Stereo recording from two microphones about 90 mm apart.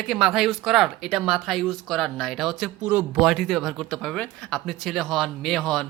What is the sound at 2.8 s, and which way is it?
Speech, 20° right (ahead or behind).